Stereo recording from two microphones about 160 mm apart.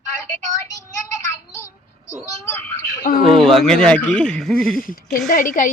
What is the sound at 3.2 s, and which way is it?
Speech, 35° right (ahead or behind).